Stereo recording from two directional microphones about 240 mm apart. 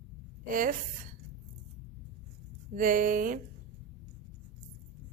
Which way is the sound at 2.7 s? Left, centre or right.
Right.